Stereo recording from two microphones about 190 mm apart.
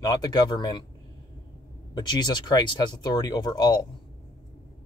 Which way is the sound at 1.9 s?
20° left (ahead or behind).